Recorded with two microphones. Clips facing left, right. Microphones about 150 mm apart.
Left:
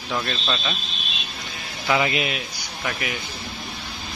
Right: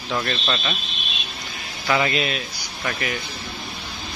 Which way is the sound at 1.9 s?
15° left (ahead or behind).